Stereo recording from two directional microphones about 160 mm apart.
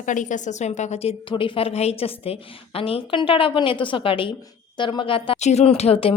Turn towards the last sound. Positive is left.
turn(degrees=40)  # may be behind; listen again after turning